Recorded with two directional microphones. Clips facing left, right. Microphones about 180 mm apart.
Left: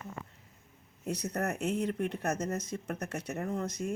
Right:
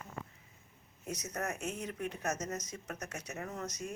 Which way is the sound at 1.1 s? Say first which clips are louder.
Left 5 dB; 65° left (ahead or behind).